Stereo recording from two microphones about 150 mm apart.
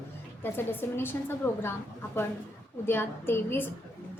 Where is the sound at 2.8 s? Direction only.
15° left (ahead or behind).